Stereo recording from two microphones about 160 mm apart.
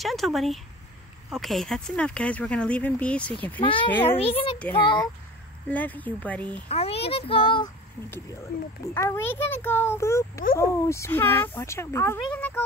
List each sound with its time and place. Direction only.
0.0 s speech: centre (ahead or behind)
4.2 s a child's voice: 35° left (ahead or behind)
5.7 s speech: 10° left (ahead or behind)
6.7 s a child's voice: 40° left (ahead or behind)
8.5 s speech: 65° left (ahead or behind)
8.8 s speech: 15° left (ahead or behind)